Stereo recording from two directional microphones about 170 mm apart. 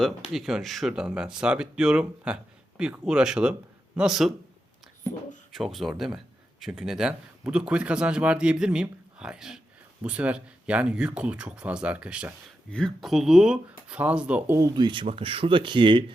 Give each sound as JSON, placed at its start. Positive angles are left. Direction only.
{"t": 0.3, "sound": "speech", "side_deg": 0}
{"t": 5.5, "sound": "speech", "side_deg": 0}